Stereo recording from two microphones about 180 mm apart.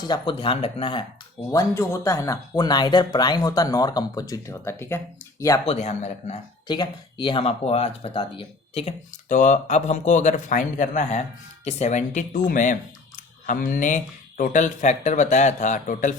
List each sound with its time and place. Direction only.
0.0 s speech: 25° left (ahead or behind)
1.5 s speech: 15° left (ahead or behind)
5.6 s speech: 40° left (ahead or behind)
6.7 s speech: 25° left (ahead or behind); by 16.1 s 45° left (ahead or behind)